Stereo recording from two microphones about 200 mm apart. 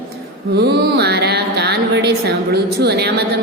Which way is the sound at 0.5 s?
55° right (ahead or behind).